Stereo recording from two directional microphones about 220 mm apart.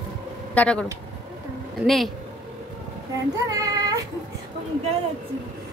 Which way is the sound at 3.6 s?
15° right (ahead or behind).